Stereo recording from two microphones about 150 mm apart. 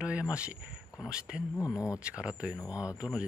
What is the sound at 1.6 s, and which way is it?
Speech, 20° left (ahead or behind).